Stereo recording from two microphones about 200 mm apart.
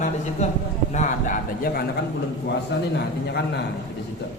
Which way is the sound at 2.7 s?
55° left (ahead or behind).